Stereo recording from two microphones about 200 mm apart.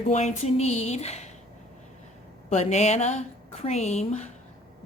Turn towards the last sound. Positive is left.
turn(degrees=35)  # may be behind; listen again after turning